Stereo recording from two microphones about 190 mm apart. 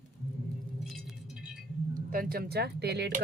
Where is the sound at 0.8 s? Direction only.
Centre (ahead or behind).